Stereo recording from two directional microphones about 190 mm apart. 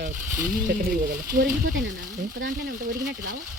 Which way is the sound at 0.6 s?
50° right (ahead or behind).